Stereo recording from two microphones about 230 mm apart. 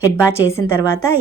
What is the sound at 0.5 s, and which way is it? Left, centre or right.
Speech, centre.